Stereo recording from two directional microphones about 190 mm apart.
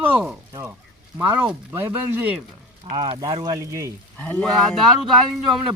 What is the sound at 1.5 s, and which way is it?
Speech, 10° right (ahead or behind).